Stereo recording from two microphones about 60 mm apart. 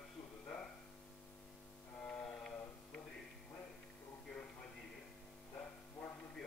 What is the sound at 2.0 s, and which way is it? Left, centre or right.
Mantra, centre.